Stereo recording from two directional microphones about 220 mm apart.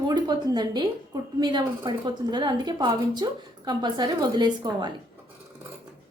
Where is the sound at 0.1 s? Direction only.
20° right (ahead or behind).